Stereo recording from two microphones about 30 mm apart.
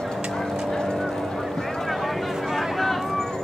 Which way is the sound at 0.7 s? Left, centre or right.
Centre.